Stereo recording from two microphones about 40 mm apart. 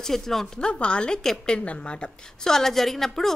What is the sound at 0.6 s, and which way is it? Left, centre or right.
Speech, left.